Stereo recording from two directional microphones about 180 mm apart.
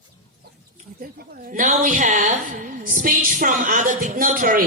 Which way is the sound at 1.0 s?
50° right (ahead or behind).